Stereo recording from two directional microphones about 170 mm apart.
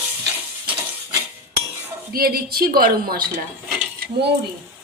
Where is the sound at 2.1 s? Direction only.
60° right (ahead or behind).